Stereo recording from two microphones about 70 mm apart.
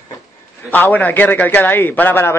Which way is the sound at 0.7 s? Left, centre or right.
Left.